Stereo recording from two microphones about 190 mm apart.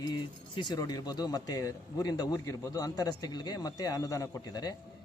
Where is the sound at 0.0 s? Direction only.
25° left (ahead or behind).